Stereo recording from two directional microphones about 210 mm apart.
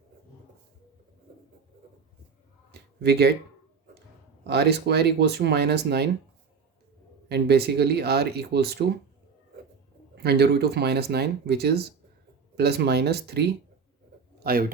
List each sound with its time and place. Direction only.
3.0 s speech: 50° right (ahead or behind)
4.4 s speech: 50° right (ahead or behind)
7.3 s speech: 50° right (ahead or behind)
10.2 s speech: 50° right (ahead or behind)
14.3 s a sound: 45° right (ahead or behind)